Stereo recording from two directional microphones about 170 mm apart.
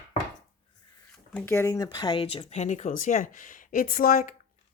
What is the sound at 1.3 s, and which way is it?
Speech, 15° left (ahead or behind).